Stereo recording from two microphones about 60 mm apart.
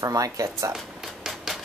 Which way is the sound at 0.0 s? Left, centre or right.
Right.